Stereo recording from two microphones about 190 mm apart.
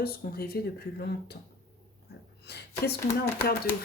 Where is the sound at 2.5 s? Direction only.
60° left (ahead or behind).